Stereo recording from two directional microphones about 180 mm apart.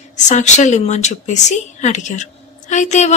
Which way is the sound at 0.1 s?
40° left (ahead or behind).